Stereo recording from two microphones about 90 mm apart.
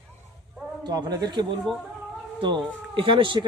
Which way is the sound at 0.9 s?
45° right (ahead or behind).